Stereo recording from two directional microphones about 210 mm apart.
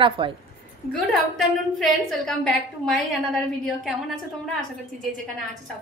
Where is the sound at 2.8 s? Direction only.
Centre (ahead or behind).